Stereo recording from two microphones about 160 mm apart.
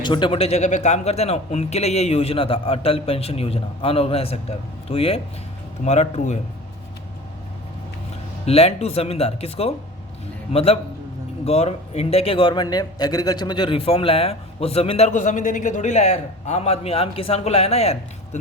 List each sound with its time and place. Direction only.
0.0 s a man's voice: 30° left (ahead or behind); by 6.4 s 45° left (ahead or behind)
8.4 s a man's voice: 40° left (ahead or behind)